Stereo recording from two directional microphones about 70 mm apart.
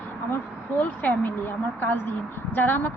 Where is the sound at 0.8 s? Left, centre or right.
Left.